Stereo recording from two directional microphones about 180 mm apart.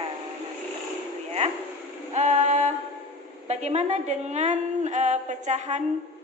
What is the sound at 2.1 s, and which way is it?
A woman's voice, 40° right (ahead or behind).